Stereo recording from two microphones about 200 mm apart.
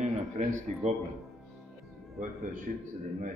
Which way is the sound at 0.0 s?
40° right (ahead or behind).